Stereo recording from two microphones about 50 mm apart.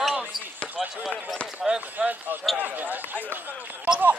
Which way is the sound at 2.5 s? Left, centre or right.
Right.